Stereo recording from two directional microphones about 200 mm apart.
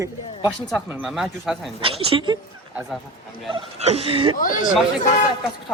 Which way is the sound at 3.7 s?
30° right (ahead or behind).